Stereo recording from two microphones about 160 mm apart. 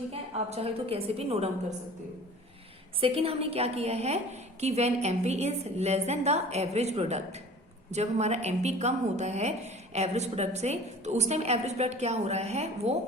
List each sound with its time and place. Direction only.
0.1 s a woman's voice: 40° right (ahead or behind)
3.0 s a woman's voice: 35° right (ahead or behind)